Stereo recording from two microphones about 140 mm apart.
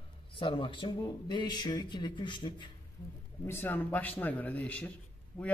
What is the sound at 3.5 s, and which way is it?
A man's voice, 15° left (ahead or behind).